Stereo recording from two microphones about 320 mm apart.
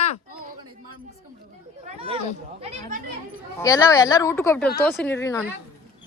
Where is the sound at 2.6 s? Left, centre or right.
Centre.